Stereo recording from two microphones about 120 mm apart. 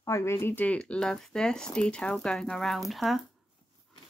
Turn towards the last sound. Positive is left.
turn(degrees=0)  # may be behind; listen again after turning